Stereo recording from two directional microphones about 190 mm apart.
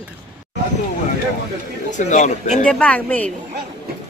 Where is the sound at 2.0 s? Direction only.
40° left (ahead or behind).